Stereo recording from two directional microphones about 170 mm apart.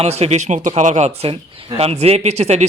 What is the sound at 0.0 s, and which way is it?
Speech, 40° right (ahead or behind).